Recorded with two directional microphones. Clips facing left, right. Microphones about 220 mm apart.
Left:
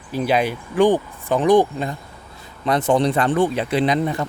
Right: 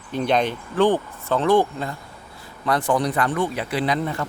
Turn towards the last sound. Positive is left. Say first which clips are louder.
# left 4 dB
turn(degrees=20)  # may be behind; listen again after turning